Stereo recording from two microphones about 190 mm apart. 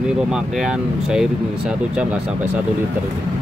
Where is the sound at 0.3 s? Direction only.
5° right (ahead or behind).